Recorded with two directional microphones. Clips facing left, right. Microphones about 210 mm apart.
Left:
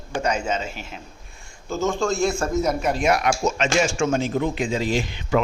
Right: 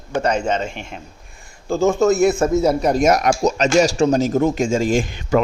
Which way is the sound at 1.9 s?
5° right (ahead or behind).